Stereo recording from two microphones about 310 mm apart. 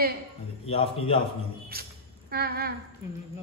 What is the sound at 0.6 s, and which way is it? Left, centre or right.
Speech, centre.